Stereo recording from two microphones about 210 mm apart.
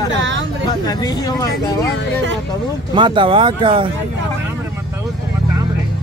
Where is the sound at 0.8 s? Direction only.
20° left (ahead or behind).